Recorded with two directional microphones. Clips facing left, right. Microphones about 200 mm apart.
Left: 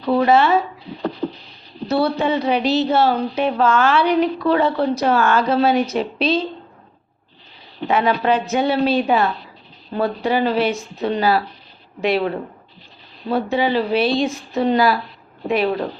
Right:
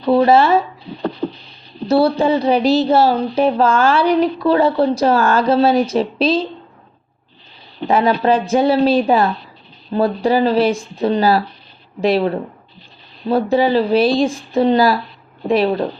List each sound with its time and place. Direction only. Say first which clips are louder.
0.0 s speech: right 3 dB; 30° right (ahead or behind)
1.2 s a sound: right 2 dB; 25° right (ahead or behind)
1.9 s speech: right 5 dB; 30° right (ahead or behind)
7.9 s speech: right 3 dB; 35° right (ahead or behind)
13.3 s speech: right 4 dB; 35° right (ahead or behind)